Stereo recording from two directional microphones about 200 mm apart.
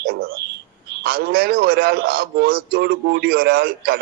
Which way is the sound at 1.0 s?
50° right (ahead or behind).